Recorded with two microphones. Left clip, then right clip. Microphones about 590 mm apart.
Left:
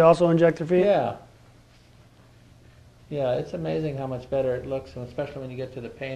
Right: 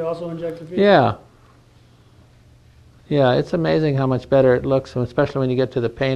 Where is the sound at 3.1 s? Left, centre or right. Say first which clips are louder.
Right 9 dB; right.